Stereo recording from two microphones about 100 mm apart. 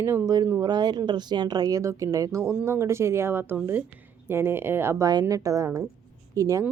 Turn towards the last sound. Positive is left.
turn(degrees=-35)  # may be behind; listen again after turning